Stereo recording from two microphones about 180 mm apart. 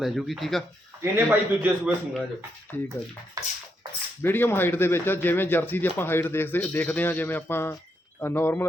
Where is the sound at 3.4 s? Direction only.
20° right (ahead or behind).